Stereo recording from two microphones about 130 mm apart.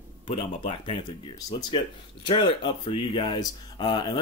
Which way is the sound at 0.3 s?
50° left (ahead or behind).